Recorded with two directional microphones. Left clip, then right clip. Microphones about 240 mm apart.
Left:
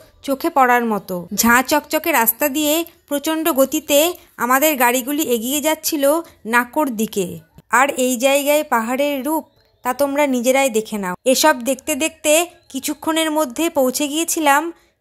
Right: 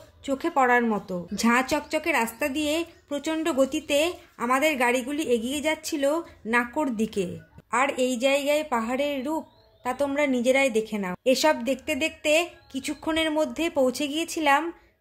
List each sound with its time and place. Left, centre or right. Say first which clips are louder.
0.2 s a woman's voice: left 8 dB; left